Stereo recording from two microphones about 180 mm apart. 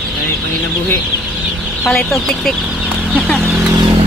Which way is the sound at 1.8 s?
Centre (ahead or behind).